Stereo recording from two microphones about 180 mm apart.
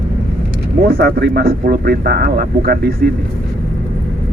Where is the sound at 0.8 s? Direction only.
60° right (ahead or behind).